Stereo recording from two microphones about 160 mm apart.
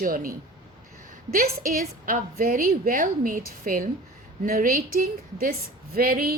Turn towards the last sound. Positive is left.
turn(degrees=-65)  # may be behind; listen again after turning